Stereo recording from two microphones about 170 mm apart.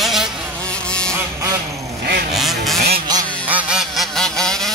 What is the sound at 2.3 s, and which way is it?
Goose, centre (ahead or behind).